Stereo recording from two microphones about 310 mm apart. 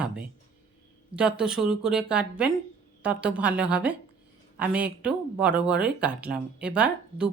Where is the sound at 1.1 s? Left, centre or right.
Centre.